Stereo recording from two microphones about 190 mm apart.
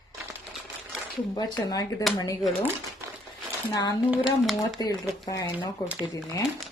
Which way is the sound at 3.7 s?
20° left (ahead or behind).